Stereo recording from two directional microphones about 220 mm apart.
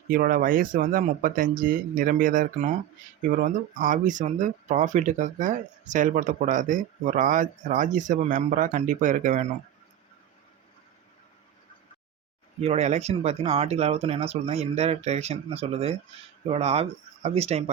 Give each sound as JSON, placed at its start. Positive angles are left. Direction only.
{"t": 0.1, "sound": "speech", "side_deg": -40}
{"t": 12.6, "sound": "speech", "side_deg": -30}